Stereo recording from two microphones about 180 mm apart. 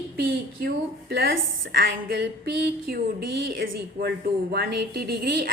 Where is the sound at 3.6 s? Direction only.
65° right (ahead or behind).